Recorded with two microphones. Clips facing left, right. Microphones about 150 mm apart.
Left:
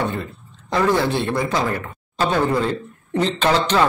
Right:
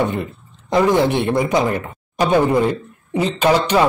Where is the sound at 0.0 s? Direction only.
20° right (ahead or behind).